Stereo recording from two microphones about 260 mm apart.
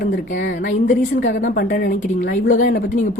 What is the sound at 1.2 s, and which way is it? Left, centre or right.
A woman's voice, left.